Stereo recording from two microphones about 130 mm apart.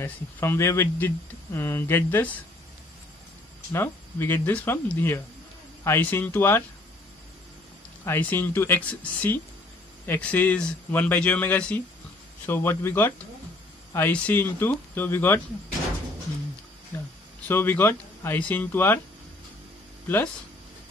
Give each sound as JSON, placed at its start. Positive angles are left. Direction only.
{"t": 0.0, "sound": "speech", "side_deg": 20}
{"t": 3.7, "sound": "speech", "side_deg": 20}
{"t": 8.0, "sound": "speech", "side_deg": 15}
{"t": 16.9, "sound": "a sound", "side_deg": 15}
{"t": 17.5, "sound": "speech", "side_deg": 15}